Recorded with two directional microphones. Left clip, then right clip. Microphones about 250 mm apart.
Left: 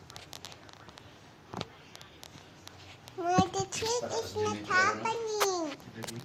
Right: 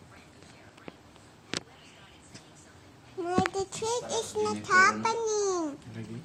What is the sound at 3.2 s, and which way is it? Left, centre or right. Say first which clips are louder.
Child singing: left 1 dB; centre.